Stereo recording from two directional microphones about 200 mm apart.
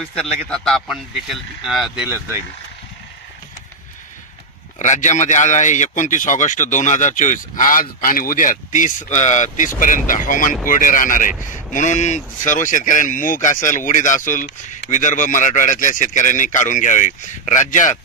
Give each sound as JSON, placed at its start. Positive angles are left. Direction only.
{"t": 0.0, "sound": "speech", "side_deg": 5}
{"t": 4.7, "sound": "speech", "side_deg": 35}